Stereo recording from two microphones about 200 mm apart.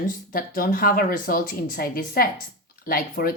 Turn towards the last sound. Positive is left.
turn(degrees=45)  # may be behind; listen again after turning